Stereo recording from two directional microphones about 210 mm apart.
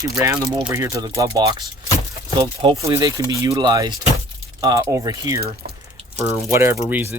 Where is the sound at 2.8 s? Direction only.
15° right (ahead or behind).